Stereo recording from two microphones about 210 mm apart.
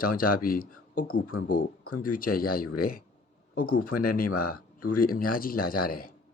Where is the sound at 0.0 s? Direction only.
45° left (ahead or behind).